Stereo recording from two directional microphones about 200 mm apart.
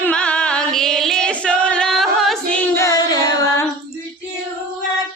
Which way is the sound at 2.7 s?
15° left (ahead or behind).